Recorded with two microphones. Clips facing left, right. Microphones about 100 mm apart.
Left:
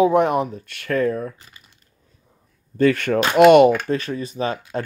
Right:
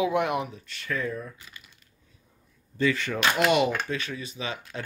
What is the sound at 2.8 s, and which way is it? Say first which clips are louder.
Speech: left 9 dB; 55° left (ahead or behind).